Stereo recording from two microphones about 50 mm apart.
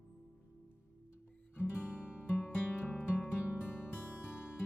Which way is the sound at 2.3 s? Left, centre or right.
Left.